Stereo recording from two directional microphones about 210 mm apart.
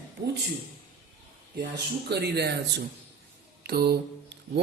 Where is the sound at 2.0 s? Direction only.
50° right (ahead or behind).